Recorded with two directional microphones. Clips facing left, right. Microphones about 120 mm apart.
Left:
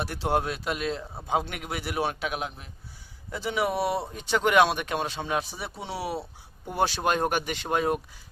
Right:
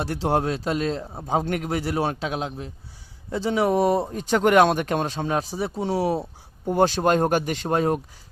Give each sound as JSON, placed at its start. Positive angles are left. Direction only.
{"t": 0.0, "sound": "speech", "side_deg": -30}